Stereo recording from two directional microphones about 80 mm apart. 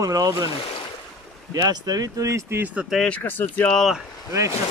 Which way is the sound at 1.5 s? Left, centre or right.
Right.